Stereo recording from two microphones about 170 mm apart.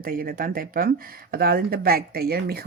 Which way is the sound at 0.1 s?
60° right (ahead or behind).